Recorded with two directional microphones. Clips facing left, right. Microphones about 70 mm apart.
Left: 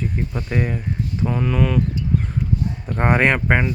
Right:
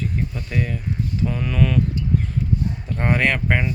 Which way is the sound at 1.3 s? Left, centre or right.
Centre.